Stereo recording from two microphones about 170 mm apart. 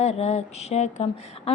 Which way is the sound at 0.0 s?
40° left (ahead or behind).